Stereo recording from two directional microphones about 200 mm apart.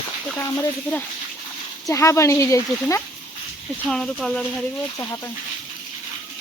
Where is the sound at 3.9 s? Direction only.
5° left (ahead or behind).